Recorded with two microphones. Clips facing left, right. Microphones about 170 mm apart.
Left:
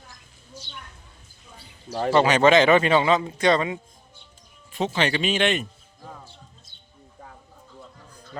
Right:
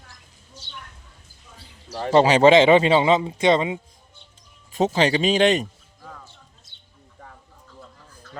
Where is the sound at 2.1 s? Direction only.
30° right (ahead or behind).